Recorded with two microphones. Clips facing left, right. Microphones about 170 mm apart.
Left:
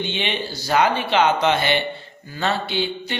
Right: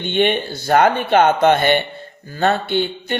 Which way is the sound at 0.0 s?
55° right (ahead or behind).